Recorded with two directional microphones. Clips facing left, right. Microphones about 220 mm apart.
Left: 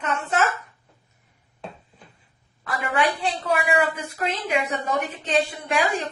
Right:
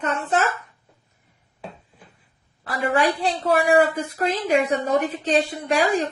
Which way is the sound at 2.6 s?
35° right (ahead or behind).